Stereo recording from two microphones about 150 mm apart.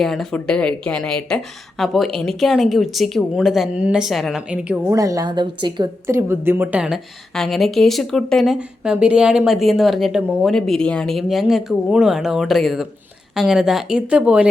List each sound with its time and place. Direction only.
0.0 s a woman's voice: centre (ahead or behind)
4.9 s a woman's voice: 20° right (ahead or behind)
6.1 s a woman's voice: 15° right (ahead or behind)